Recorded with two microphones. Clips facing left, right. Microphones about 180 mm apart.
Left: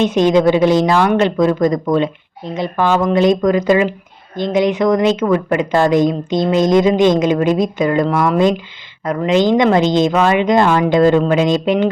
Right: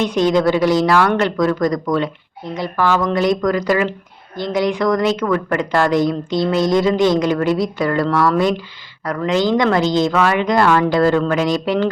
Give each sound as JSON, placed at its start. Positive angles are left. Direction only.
{"t": 0.0, "sound": "speech", "side_deg": 20}